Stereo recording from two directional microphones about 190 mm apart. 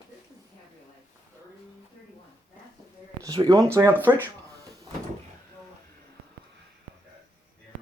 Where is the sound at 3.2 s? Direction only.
20° right (ahead or behind).